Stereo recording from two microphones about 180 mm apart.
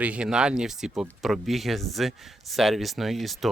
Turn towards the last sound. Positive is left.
turn(degrees=0)  # may be behind; listen again after turning